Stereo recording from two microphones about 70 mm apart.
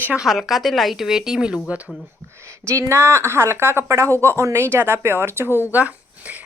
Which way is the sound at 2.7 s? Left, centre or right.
Right.